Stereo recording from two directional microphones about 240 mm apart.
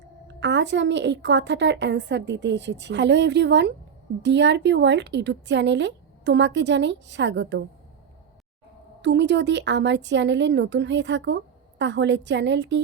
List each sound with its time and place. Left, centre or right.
0.3 s a woman's voice: right
9.0 s a woman's voice: right